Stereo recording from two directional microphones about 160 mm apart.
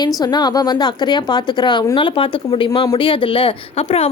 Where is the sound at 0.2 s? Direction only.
25° left (ahead or behind).